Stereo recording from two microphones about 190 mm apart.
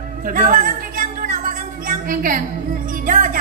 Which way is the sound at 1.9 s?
45° right (ahead or behind).